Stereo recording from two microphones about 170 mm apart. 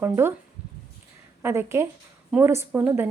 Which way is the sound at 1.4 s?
15° right (ahead or behind).